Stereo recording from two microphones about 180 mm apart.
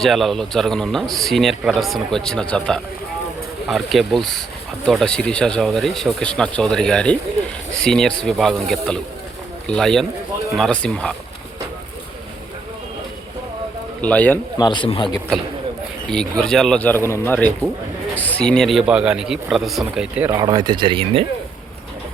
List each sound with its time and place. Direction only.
0.0 s a man's voice: centre (ahead or behind)
14.0 s speech: 10° left (ahead or behind)
14.6 s speech: 25° left (ahead or behind)
16.4 s a man's voice: 5° left (ahead or behind)
20.4 s speech: 20° right (ahead or behind)